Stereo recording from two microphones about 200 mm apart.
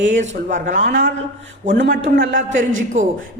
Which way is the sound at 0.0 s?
40° right (ahead or behind).